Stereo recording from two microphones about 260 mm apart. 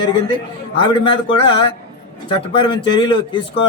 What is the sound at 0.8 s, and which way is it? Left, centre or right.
Speech, centre.